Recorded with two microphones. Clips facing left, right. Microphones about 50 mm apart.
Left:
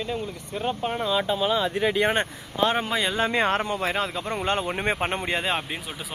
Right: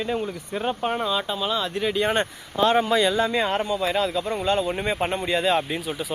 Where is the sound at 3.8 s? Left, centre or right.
Left.